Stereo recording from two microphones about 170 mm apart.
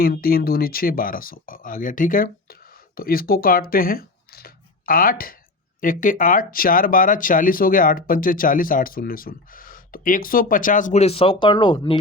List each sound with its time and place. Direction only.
0.0 s speech: 60° left (ahead or behind); by 11.9 s 25° left (ahead or behind)